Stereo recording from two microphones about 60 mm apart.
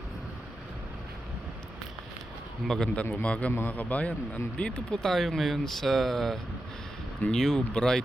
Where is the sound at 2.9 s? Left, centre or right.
Left.